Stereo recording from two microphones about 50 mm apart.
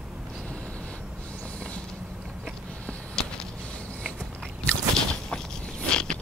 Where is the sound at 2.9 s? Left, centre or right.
Centre.